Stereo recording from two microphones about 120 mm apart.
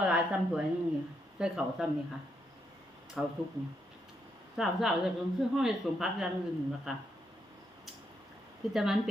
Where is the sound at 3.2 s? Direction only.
5° right (ahead or behind).